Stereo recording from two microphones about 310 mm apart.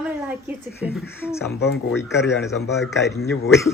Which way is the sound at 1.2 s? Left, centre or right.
Centre.